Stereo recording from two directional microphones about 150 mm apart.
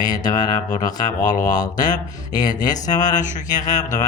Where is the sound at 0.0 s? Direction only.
25° left (ahead or behind).